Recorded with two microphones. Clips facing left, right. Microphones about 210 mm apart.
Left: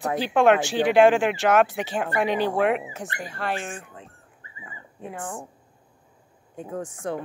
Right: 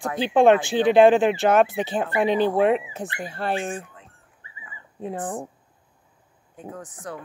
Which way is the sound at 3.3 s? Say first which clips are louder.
Right 4 dB; 30° right (ahead or behind).